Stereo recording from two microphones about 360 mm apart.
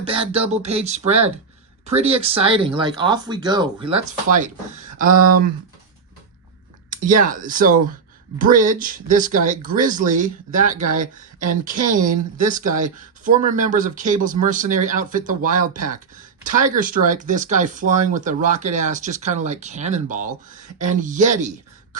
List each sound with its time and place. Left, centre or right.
0.0 s speech: centre
6.9 s speech: right